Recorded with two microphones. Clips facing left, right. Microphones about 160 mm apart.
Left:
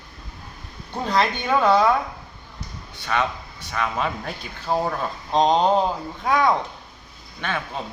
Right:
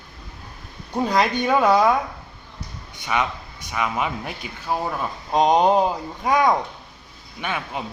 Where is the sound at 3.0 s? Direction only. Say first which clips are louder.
Even; 15° right (ahead or behind).